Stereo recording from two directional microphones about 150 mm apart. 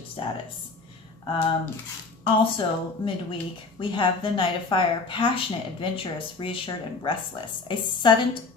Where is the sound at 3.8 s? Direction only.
35° left (ahead or behind).